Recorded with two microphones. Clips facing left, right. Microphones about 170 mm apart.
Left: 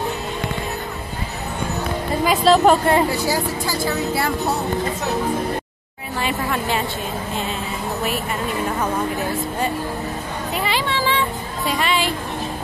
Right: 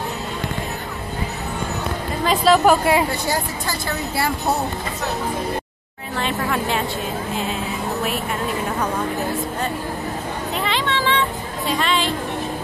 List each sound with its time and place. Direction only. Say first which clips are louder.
2.2 s speech: left 1 dB; centre (ahead or behind)
3.1 s speech: left 2 dB; 5° left (ahead or behind)
6.1 s speech: even; 5° left (ahead or behind)
10.6 s music: even; 5° left (ahead or behind)